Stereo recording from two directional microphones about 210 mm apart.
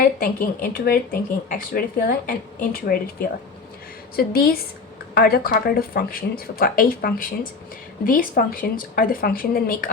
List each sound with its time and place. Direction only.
0.0 s speech: 45° left (ahead or behind)